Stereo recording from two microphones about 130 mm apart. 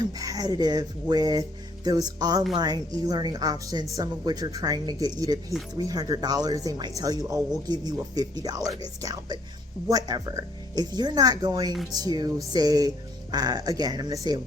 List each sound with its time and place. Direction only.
0.0 s speech: 30° right (ahead or behind)